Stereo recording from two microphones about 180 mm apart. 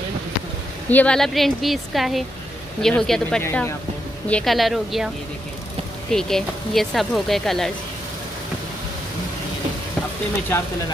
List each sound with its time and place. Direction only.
0.8 s speech: 5° left (ahead or behind)